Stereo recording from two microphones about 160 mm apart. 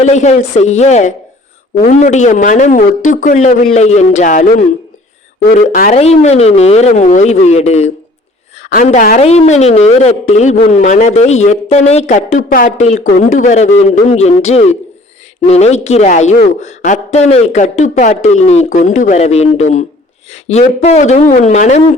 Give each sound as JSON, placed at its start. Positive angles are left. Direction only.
{"t": 0.0, "sound": "speech", "side_deg": 45}
{"t": 3.8, "sound": "speech", "side_deg": 45}
{"t": 5.9, "sound": "speech", "side_deg": 40}